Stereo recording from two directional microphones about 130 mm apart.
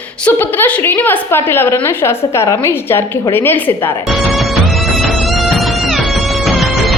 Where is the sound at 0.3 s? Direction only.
15° left (ahead or behind).